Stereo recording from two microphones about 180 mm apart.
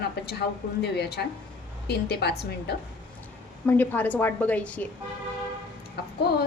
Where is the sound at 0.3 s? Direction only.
65° left (ahead or behind).